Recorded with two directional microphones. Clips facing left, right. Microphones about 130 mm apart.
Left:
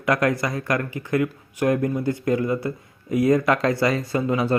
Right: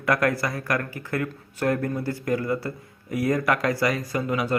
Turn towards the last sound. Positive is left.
turn(degrees=25)  # may be behind; listen again after turning